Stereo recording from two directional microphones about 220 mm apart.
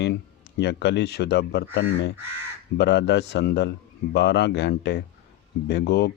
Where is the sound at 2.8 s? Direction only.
50° left (ahead or behind).